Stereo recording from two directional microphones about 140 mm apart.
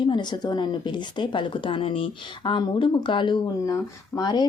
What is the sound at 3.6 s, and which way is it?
Speech, 25° left (ahead or behind).